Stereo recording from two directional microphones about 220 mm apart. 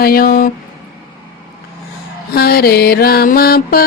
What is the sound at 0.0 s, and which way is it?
Speech, 40° left (ahead or behind).